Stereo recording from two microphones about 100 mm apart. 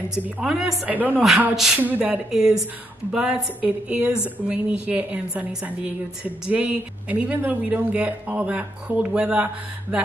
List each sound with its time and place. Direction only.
0.1 s a woman's voice: 5° right (ahead or behind)
0.9 s a woman's voice: 15° right (ahead or behind)
1.5 s a woman's voice: 5° right (ahead or behind)
1.8 s a woman's voice: 15° right (ahead or behind)